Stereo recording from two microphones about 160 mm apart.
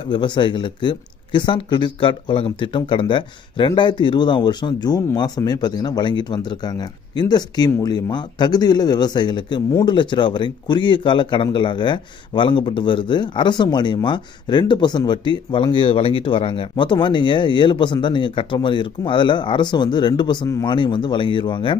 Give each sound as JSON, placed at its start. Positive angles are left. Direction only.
{"t": 0.1, "sound": "speech", "side_deg": 30}